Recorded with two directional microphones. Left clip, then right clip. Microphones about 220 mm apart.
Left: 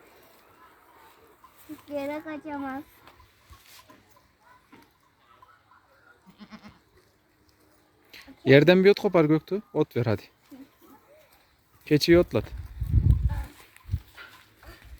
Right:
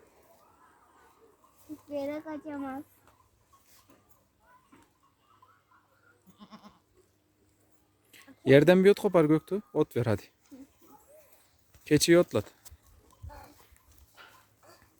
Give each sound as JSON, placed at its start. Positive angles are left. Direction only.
{"t": 1.7, "sound": "speech", "side_deg": 0}
{"t": 6.4, "sound": "goat", "side_deg": 0}
{"t": 8.1, "sound": "speech", "side_deg": 0}
{"t": 11.9, "sound": "speech", "side_deg": 0}
{"t": 14.2, "sound": "dog", "side_deg": -20}